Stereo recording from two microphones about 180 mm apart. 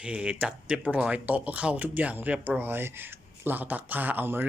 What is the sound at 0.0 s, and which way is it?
Speech, 5° right (ahead or behind).